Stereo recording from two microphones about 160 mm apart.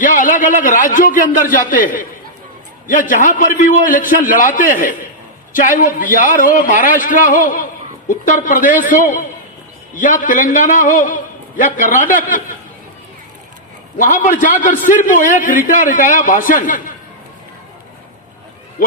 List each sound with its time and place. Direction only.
0.0 s a man's voice: 55° left (ahead or behind)
14.0 s a man's voice: 55° left (ahead or behind)